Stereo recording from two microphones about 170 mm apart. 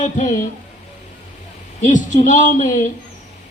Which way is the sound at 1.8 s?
45° left (ahead or behind).